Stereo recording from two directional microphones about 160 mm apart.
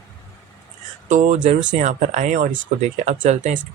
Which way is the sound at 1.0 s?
50° right (ahead or behind).